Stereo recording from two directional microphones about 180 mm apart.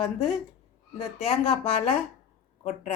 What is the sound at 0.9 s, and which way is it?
Speech, 35° left (ahead or behind).